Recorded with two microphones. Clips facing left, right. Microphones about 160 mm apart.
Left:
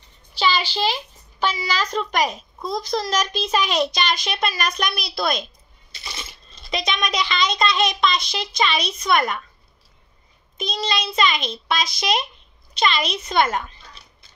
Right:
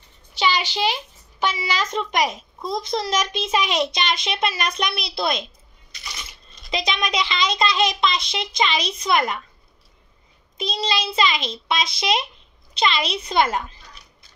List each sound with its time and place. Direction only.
0.3 s a child's voice: 20° right (ahead or behind)
1.9 s a child's voice: 25° right (ahead or behind)
2.2 s a child's voice: centre (ahead or behind)
2.8 s a child's voice: 25° right (ahead or behind)
5.9 s coin: 30° left (ahead or behind)
6.7 s a child's voice: 25° right (ahead or behind)
10.6 s a child's voice: 30° right (ahead or behind)